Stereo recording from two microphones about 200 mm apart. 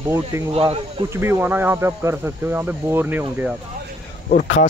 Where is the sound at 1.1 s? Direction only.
10° right (ahead or behind).